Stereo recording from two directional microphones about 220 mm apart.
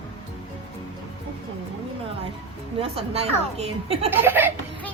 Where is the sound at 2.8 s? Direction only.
25° right (ahead or behind).